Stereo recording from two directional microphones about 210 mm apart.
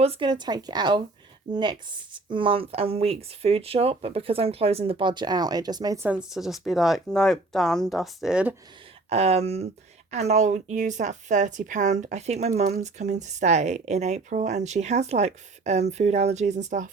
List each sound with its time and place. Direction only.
0.0 s speech: 25° right (ahead or behind); by 8.5 s 5° right (ahead or behind)
9.0 s a woman's voice: 30° right (ahead or behind)